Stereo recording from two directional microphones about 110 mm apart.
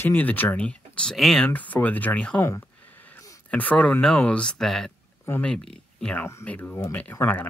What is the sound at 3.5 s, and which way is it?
Speech, 15° left (ahead or behind).